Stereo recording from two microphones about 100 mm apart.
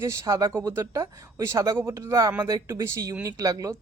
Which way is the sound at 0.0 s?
30° right (ahead or behind).